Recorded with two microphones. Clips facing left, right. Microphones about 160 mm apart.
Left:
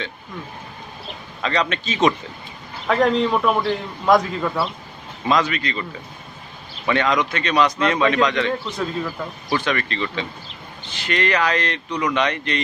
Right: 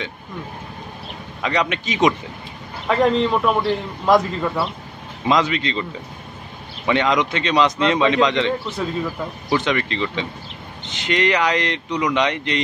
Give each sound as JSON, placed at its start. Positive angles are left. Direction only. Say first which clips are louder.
{"t": 1.4, "sound": "speech", "louder": "right 1 dB", "side_deg": -15}
{"t": 2.9, "sound": "a man's voice", "louder": "right 1 dB", "side_deg": 0}
{"t": 5.2, "sound": "speech", "louder": "right 1 dB", "side_deg": -20}
{"t": 6.9, "sound": "speech", "louder": "right 1 dB", "side_deg": -20}
{"t": 8.6, "sound": "a man's voice", "louder": "right 1 dB", "side_deg": -5}
{"t": 9.5, "sound": "speech", "louder": "right 2 dB", "side_deg": -20}